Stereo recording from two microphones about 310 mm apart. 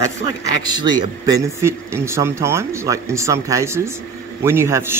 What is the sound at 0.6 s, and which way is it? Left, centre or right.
Speech, centre.